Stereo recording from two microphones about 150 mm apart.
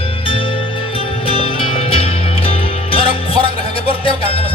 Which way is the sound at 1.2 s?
35° left (ahead or behind).